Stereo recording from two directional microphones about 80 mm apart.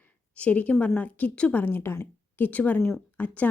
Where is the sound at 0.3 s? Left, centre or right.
Centre.